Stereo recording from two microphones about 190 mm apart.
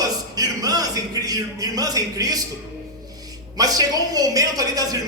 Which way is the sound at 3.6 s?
20° right (ahead or behind).